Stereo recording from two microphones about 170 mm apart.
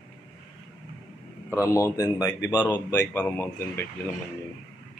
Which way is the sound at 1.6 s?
20° left (ahead or behind).